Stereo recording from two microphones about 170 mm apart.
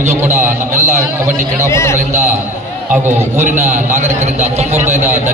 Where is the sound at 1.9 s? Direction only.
15° right (ahead or behind).